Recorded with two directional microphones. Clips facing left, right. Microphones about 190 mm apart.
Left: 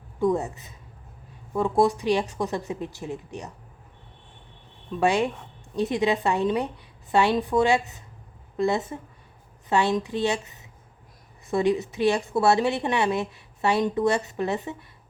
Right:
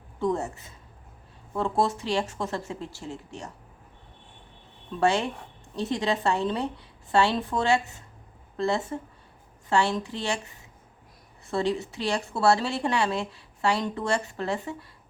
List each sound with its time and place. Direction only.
0.2 s speech: 15° left (ahead or behind)
4.9 s a woman's voice: 15° left (ahead or behind)